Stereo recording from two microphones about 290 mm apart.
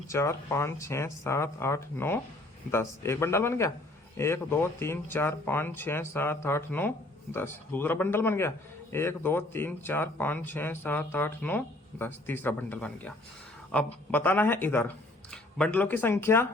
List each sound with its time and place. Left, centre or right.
0.1 s a man's voice: centre